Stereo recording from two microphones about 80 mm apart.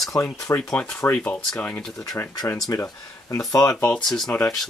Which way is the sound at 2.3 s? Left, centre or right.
Left.